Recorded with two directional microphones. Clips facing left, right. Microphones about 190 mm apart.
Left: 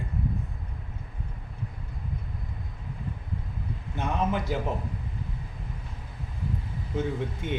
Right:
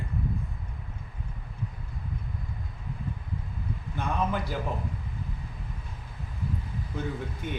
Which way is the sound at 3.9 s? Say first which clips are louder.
Left 2 dB; 20° left (ahead or behind).